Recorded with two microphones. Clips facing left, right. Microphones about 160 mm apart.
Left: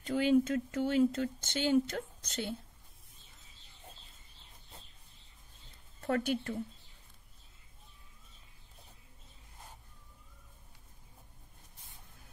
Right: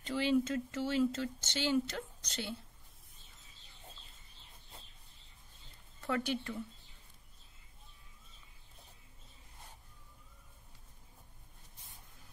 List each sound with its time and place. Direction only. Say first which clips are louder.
0.0 s speech: left 4 dB; 50° left (ahead or behind)
5.9 s a woman's voice: left 3 dB; 45° left (ahead or behind)